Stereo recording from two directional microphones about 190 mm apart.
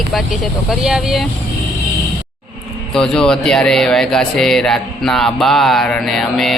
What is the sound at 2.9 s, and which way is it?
Speech, 5° left (ahead or behind).